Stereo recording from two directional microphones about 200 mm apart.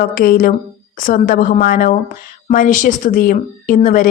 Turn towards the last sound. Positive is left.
turn(degrees=40)  # may be behind; listen again after turning